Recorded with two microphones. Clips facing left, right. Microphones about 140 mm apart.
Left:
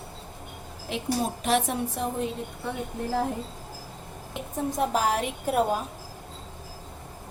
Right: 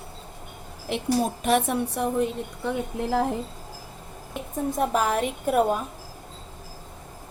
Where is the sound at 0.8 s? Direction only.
60° right (ahead or behind).